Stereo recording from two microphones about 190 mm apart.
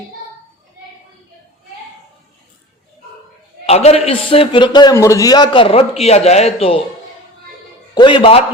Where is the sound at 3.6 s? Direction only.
35° left (ahead or behind).